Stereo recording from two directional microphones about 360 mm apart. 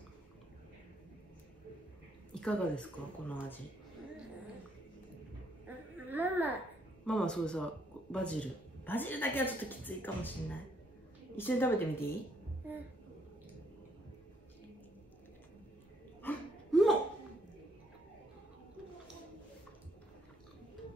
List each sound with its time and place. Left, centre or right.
2.4 s speech: centre
5.9 s a sound: centre
7.1 s speech: centre
16.2 s hiccup: centre